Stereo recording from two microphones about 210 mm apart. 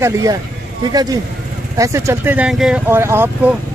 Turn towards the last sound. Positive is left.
turn(degrees=-10)  # may be behind; listen again after turning